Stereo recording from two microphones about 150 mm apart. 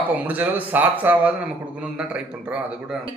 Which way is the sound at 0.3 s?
10° right (ahead or behind).